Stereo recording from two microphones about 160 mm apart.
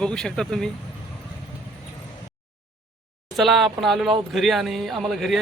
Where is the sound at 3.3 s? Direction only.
Centre (ahead or behind).